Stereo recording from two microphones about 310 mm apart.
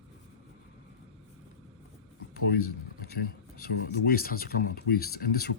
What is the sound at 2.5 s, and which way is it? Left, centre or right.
Speech, left.